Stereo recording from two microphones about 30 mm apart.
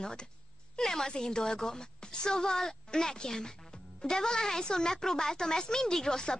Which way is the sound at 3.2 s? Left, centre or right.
Left.